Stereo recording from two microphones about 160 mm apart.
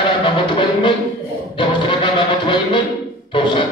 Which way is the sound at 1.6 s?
30° left (ahead or behind).